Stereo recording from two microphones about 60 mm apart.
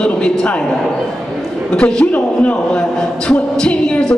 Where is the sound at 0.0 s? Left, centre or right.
Centre.